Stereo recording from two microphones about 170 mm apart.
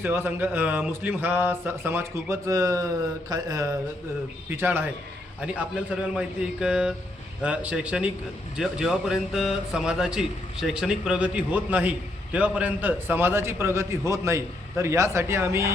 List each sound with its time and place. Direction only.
0.0 s a man's voice: 10° right (ahead or behind)
3.2 s mantra: 20° right (ahead or behind)
4.5 s a man's voice: 10° right (ahead or behind)